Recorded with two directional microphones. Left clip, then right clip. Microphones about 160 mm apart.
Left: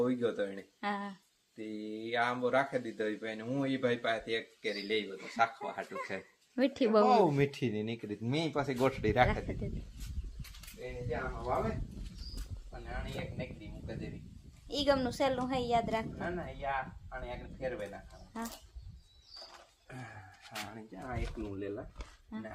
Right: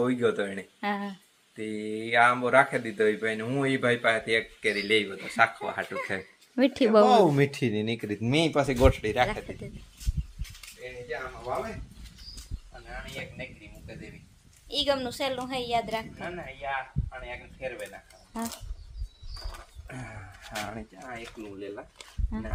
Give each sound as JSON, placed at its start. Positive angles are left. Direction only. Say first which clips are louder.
{"t": 0.0, "sound": "speech", "louder": "right 6 dB", "side_deg": -5}
{"t": 5.1, "sound": "speech", "louder": "right 7 dB", "side_deg": 0}
{"t": 14.7, "sound": "speech", "louder": "right 3 dB", "side_deg": 5}
{"t": 20.7, "sound": "speech", "louder": "right 3 dB", "side_deg": -20}
{"t": 22.3, "sound": "speech", "louder": "right 7 dB", "side_deg": 5}